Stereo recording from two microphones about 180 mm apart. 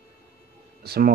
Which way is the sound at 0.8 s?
60° right (ahead or behind).